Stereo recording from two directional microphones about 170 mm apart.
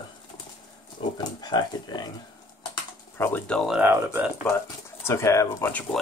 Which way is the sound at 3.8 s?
15° right (ahead or behind).